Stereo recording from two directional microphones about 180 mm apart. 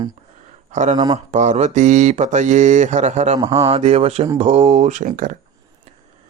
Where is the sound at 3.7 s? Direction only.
35° right (ahead or behind).